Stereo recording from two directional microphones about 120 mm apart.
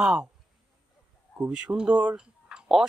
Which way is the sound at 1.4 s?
10° right (ahead or behind).